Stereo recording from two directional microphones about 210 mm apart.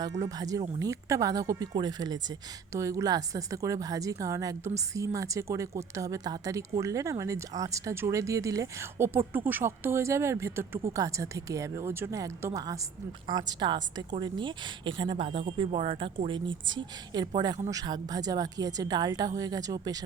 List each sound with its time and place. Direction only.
0.0 s a woman's voice: 15° right (ahead or behind)